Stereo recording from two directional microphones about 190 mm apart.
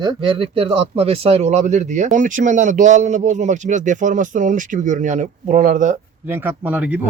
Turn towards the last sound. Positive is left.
turn(degrees=-10)  # may be behind; listen again after turning